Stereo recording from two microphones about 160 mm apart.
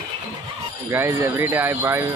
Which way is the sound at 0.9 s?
15° right (ahead or behind).